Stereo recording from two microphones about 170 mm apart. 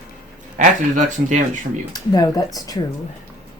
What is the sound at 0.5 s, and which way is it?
Speech, 50° right (ahead or behind).